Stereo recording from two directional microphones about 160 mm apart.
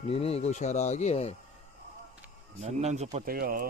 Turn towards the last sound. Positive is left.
turn(degrees=-65)  # may be behind; listen again after turning